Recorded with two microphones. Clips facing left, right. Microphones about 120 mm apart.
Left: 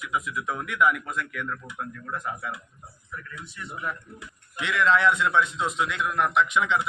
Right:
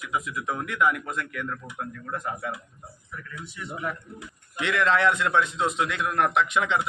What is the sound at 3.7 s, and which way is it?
Speech, 80° right.